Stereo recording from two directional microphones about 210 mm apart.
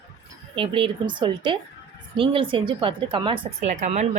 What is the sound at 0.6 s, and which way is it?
Speech, 25° right (ahead or behind).